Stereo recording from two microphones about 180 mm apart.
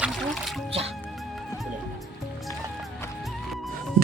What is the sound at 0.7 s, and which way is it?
Music, 35° right (ahead or behind).